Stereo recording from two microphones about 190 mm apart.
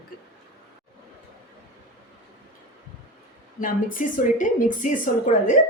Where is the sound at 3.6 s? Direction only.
45° left (ahead or behind).